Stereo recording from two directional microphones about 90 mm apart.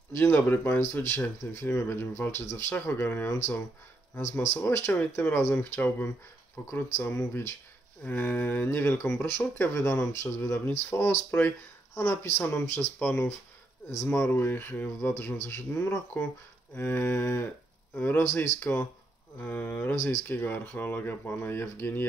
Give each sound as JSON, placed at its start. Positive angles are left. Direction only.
{"t": 0.1, "sound": "speech", "side_deg": 25}